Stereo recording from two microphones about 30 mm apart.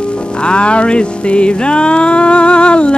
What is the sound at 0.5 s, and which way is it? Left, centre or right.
Music, left.